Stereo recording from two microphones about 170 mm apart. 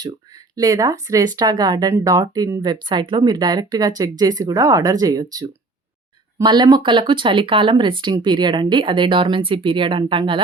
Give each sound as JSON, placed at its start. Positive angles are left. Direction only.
{"t": 0.5, "sound": "speech", "side_deg": -20}